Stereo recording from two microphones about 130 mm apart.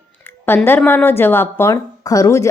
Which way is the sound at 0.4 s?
15° left (ahead or behind).